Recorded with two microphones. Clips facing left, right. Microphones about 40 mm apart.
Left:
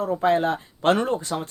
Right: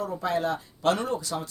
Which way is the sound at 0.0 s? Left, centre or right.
Left.